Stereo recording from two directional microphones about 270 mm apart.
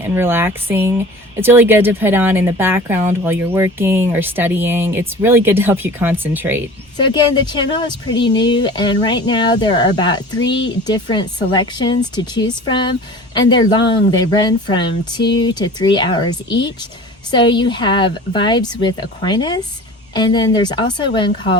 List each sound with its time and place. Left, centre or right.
0.0 s speech: centre
6.9 s speech: centre